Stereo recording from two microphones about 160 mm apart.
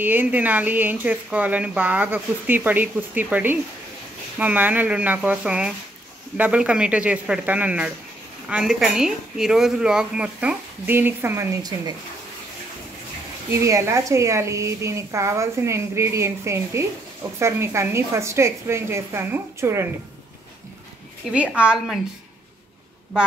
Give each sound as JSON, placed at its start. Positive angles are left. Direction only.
{"t": 0.0, "sound": "speech", "side_deg": -10}
{"t": 13.5, "sound": "speech", "side_deg": -15}
{"t": 21.3, "sound": "speech", "side_deg": -5}